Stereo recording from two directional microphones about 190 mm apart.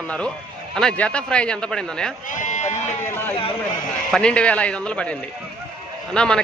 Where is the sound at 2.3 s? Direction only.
40° left (ahead or behind).